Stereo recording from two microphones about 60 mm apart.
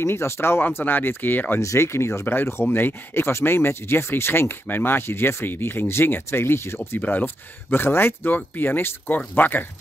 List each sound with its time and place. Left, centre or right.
0.0 s speech: left
1.6 s speech: left
7.0 s speech: left